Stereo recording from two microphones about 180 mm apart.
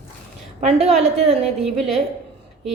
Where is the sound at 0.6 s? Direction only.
35° right (ahead or behind).